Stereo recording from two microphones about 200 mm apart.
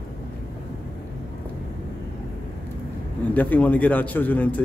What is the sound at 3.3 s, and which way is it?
A man's voice, 10° left (ahead or behind).